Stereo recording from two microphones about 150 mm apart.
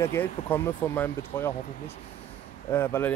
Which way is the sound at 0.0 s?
15° left (ahead or behind).